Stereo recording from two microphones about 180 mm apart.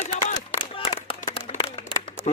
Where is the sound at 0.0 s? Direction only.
45° left (ahead or behind).